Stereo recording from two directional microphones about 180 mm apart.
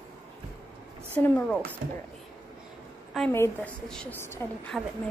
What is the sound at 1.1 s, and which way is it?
Speech, 10° left (ahead or behind).